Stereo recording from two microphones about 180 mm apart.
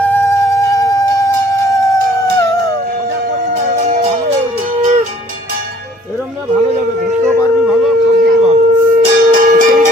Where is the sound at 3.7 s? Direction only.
40° right (ahead or behind).